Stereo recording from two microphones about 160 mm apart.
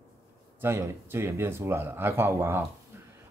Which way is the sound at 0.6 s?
15° right (ahead or behind).